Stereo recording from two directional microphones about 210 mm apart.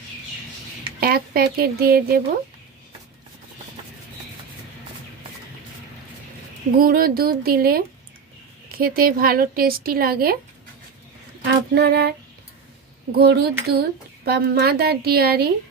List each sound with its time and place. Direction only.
1.0 s speech: 45° right (ahead or behind)
6.8 s speech: 45° right (ahead or behind)
11.4 s speech: 50° right (ahead or behind)
13.2 s speech: 50° right (ahead or behind)